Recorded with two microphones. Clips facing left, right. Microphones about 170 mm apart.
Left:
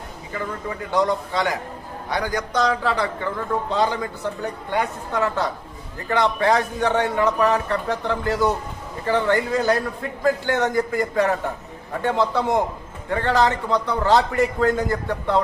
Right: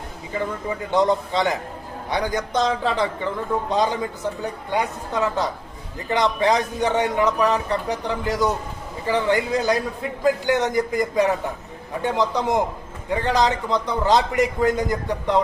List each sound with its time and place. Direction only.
0.3 s a man's voice: 25° right (ahead or behind)